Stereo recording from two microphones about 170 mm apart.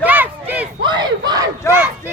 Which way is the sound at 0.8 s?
25° right (ahead or behind).